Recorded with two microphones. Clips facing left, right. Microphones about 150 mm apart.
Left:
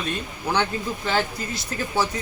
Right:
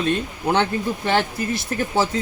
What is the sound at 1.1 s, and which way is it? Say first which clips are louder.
Speech: right 4 dB; 25° right (ahead or behind).